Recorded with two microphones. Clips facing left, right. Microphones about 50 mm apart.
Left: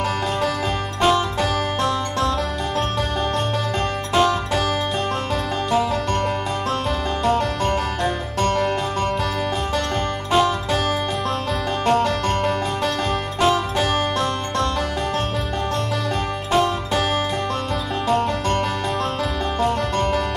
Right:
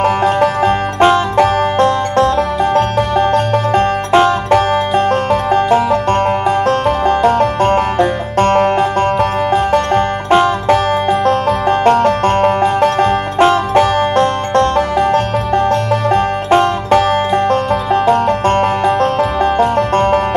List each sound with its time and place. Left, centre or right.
0.0 s music: right